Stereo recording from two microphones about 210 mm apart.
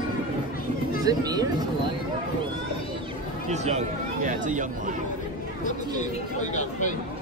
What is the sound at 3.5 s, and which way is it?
Speech, 30° right (ahead or behind).